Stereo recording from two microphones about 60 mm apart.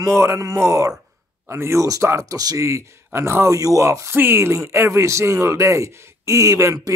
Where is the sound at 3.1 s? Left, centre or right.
Right.